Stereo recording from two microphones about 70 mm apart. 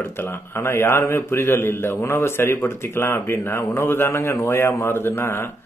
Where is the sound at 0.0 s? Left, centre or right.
Left.